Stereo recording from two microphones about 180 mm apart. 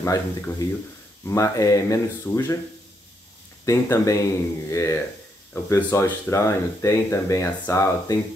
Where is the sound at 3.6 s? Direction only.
15° left (ahead or behind).